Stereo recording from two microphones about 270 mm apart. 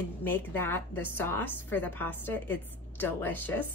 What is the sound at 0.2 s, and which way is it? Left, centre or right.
A woman's voice, centre.